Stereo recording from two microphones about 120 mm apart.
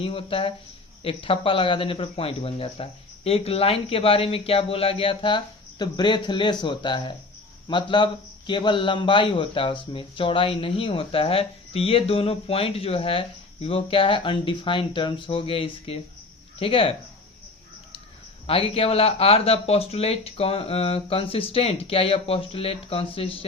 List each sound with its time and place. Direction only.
0.0 s a man's voice: 50° left (ahead or behind)
18.4 s a man's voice: 50° left (ahead or behind)